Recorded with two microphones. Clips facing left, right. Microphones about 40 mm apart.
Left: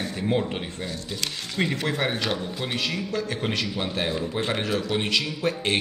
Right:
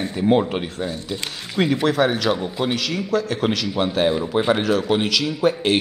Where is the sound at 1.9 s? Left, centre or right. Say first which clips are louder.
Right 7 dB; right.